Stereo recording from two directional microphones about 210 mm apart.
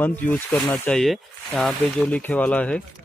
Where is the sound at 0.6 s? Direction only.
20° left (ahead or behind).